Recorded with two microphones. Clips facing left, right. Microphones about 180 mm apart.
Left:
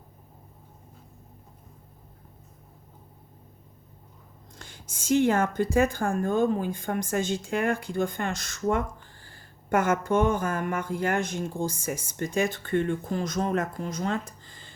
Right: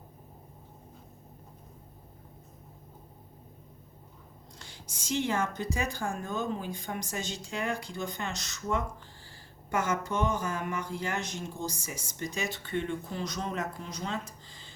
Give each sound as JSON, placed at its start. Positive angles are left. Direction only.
{"t": 4.5, "sound": "speech", "side_deg": 50}